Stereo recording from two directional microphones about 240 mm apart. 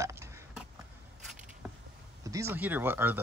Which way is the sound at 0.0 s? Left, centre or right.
Centre.